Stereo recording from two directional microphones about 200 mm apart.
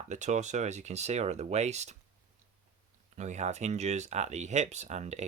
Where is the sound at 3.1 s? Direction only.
35° right (ahead or behind).